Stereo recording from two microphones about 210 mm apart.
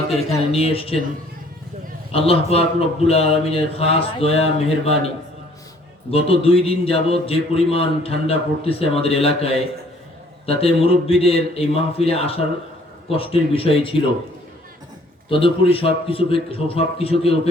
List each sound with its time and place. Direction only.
0.3 s a man's voice: 25° left (ahead or behind)
2.1 s a man's voice: 25° left (ahead or behind)
15.3 s a man's voice: 25° left (ahead or behind)